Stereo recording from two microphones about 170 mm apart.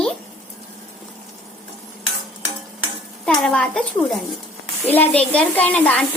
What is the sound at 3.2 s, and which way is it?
A child's voice, 5° left (ahead or behind).